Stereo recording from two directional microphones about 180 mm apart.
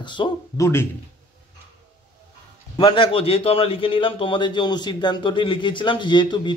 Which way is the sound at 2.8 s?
25° left (ahead or behind).